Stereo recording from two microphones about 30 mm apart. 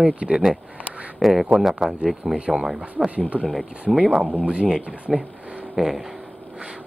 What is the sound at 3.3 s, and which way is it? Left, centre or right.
Speech, right.